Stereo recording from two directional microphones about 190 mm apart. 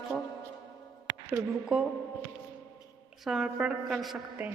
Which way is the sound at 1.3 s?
5° right (ahead or behind).